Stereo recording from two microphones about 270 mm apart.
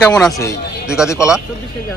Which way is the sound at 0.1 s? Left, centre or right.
Centre.